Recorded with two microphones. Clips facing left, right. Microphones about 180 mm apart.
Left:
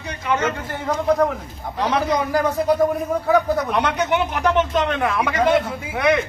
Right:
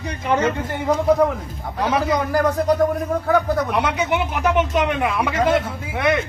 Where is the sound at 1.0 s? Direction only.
5° right (ahead or behind).